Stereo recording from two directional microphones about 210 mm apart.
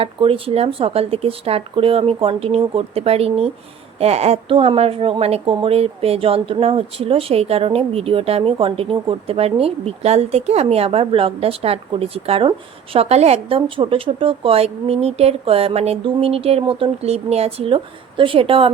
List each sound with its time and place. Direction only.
0.0 s speech: 25° right (ahead or behind)